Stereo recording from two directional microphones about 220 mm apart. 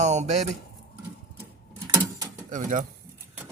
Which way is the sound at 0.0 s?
30° right (ahead or behind).